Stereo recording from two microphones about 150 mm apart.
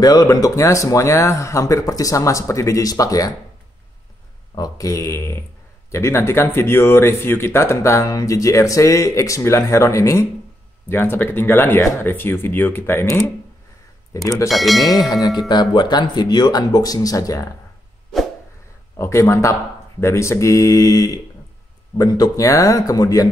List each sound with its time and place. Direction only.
0.0 s speech: 25° left (ahead or behind)
4.6 s speech: 25° left (ahead or behind)
14.5 s speech: centre (ahead or behind)
14.9 s speech: 25° left (ahead or behind)
18.9 s speech: 20° left (ahead or behind)